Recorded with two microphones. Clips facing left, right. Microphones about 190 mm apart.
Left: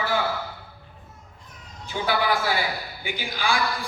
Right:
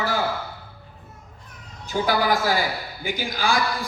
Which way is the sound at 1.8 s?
40° right (ahead or behind).